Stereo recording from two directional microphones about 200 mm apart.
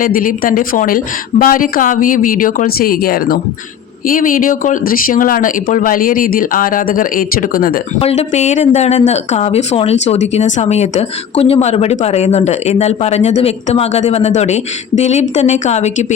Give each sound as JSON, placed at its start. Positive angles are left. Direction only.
{"t": 0.0, "sound": "speech", "side_deg": 45}
{"t": 7.9, "sound": "speech", "side_deg": 30}